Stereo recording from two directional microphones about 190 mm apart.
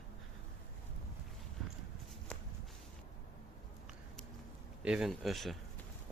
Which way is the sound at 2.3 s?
5° left (ahead or behind).